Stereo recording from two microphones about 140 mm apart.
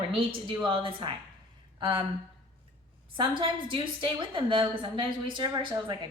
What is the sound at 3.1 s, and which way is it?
A woman's voice, 35° right (ahead or behind).